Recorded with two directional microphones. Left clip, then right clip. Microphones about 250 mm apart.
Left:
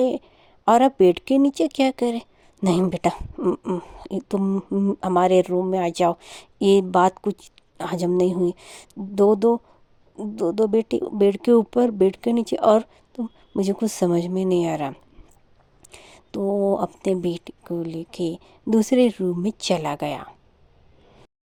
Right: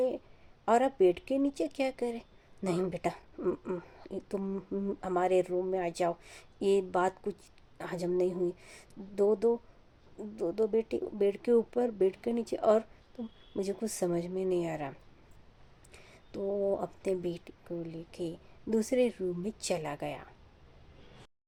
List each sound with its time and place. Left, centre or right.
0.6 s speech: left